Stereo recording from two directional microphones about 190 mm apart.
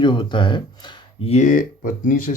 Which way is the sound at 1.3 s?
40° left (ahead or behind).